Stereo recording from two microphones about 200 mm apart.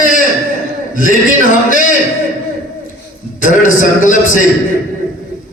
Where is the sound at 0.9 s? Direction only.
45° left (ahead or behind).